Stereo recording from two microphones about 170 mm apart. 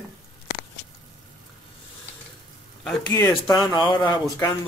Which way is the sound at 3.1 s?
20° left (ahead or behind).